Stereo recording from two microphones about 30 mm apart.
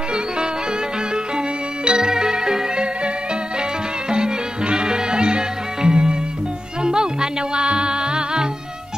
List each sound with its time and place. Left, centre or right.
1.9 s music: right
4.1 s music: right